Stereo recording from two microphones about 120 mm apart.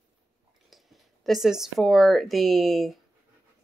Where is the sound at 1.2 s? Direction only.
Centre (ahead or behind).